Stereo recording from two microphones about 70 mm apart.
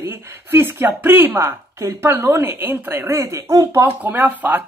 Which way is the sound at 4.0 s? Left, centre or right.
Right.